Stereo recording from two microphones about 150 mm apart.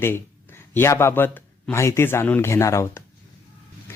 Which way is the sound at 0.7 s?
15° left (ahead or behind).